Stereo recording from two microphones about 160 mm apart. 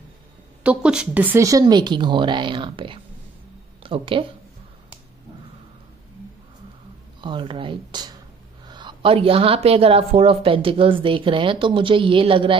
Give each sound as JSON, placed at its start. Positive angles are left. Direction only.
{"t": 0.7, "sound": "speech", "side_deg": -5}
{"t": 7.2, "sound": "a woman's voice", "side_deg": -30}